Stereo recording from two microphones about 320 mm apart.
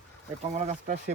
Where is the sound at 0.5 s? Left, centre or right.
Right.